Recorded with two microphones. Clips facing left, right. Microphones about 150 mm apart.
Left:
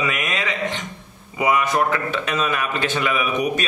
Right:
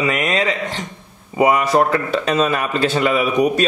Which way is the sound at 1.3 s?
35° right (ahead or behind).